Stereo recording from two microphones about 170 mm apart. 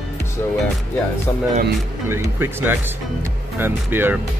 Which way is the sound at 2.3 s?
15° right (ahead or behind).